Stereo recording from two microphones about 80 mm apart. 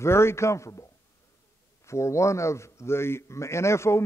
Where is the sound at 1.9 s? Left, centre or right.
Left.